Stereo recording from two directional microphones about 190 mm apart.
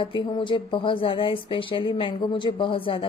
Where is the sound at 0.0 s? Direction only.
25° left (ahead or behind).